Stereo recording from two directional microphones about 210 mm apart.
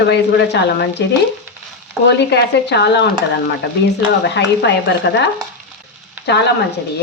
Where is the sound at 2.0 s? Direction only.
55° left (ahead or behind).